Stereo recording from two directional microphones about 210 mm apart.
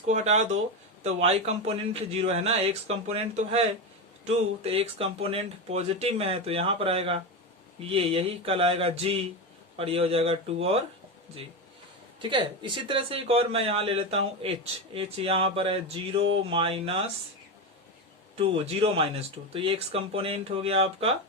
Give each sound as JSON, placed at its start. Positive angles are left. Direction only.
{"t": 0.0, "sound": "speech", "side_deg": -30}
{"t": 12.2, "sound": "speech", "side_deg": -25}
{"t": 18.3, "sound": "speech", "side_deg": -30}